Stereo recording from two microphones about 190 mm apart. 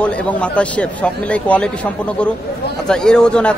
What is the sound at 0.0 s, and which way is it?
A man's voice, 5° left (ahead or behind).